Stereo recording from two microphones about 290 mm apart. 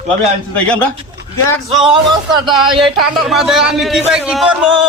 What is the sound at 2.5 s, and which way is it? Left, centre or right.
A man's voice, centre.